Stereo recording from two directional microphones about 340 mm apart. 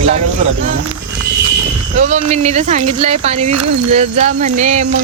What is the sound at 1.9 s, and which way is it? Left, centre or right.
Speech, centre.